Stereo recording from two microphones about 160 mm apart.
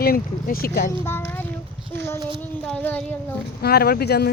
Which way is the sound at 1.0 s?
15° left (ahead or behind).